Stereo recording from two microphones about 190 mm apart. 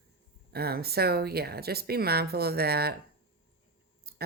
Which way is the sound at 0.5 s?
55° right (ahead or behind).